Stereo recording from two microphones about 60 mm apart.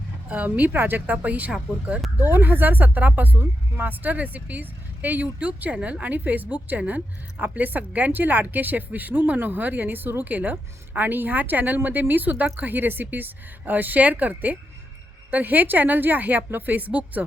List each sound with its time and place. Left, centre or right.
0.3 s a woman's voice: right